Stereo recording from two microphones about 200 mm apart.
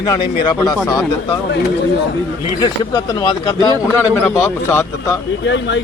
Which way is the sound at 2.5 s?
20° left (ahead or behind).